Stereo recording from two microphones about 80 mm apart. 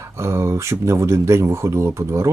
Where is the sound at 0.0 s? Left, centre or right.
Right.